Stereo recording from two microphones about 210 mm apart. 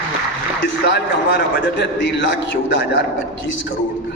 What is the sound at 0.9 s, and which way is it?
A man's voice, 55° left (ahead or behind).